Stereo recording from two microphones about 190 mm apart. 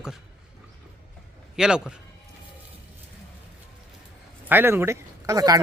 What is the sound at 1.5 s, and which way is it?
Speech, 5° right (ahead or behind).